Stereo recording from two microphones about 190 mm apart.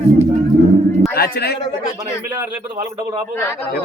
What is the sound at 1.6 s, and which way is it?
Speech, 20° left (ahead or behind).